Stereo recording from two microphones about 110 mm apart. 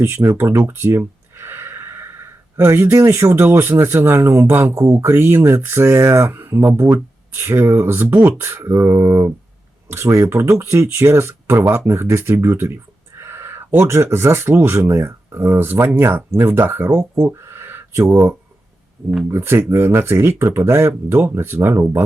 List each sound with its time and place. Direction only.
0.0 s speech: 25° right (ahead or behind)